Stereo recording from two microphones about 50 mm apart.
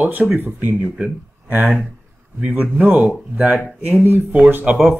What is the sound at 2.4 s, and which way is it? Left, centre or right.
Speech, right.